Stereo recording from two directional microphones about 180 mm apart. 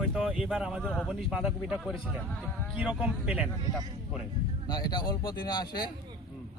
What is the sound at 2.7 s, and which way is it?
Speech, 5° right (ahead or behind).